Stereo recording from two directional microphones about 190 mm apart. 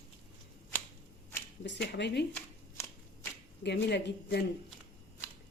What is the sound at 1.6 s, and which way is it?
Speech, 65° left (ahead or behind).